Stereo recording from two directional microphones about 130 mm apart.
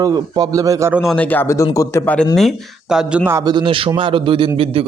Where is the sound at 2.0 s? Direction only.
10° left (ahead or behind).